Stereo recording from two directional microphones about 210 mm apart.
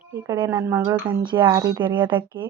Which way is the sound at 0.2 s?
15° right (ahead or behind).